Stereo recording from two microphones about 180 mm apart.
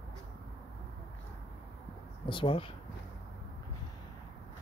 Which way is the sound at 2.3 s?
30° left (ahead or behind).